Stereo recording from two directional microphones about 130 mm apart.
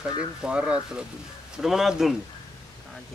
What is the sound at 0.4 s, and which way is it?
A man's voice, 10° right (ahead or behind).